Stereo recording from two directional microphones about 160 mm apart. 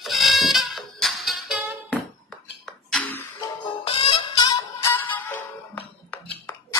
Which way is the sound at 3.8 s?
35° left (ahead or behind).